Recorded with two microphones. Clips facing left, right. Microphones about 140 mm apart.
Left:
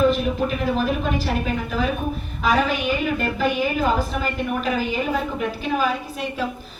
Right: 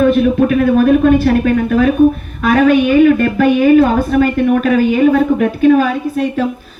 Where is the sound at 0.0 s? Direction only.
60° right (ahead or behind).